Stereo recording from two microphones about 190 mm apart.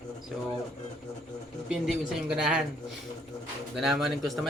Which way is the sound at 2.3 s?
5° right (ahead or behind).